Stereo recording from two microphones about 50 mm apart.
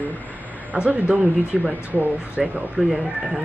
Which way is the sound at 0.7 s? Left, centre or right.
Right.